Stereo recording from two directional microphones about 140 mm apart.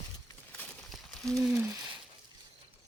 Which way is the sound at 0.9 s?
5° right (ahead or behind).